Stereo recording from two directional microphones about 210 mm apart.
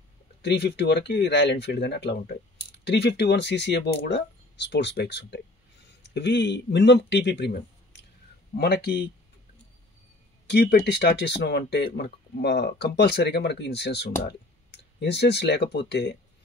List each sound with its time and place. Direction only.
0.4 s speech: 55° left (ahead or behind)
10.4 s speech: 50° left (ahead or behind)